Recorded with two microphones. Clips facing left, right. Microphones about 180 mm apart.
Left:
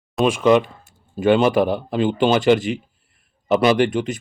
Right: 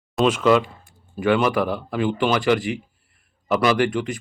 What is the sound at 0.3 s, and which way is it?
Speech, 15° left (ahead or behind).